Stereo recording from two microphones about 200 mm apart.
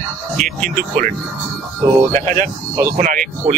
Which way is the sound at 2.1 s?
40° right (ahead or behind).